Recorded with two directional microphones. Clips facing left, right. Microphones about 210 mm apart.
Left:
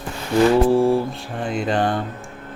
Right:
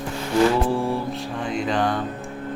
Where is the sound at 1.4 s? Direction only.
50° left (ahead or behind).